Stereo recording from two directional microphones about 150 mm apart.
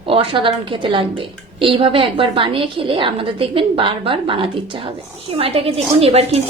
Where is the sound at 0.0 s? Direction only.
35° right (ahead or behind).